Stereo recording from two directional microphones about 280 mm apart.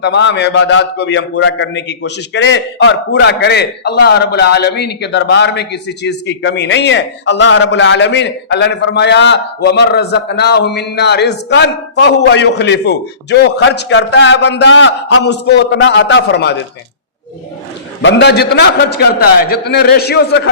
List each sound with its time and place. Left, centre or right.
0.0 s a man's voice: left
18.0 s a man's voice: left